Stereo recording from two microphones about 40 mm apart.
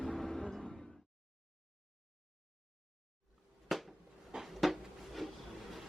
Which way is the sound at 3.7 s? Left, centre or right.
Centre.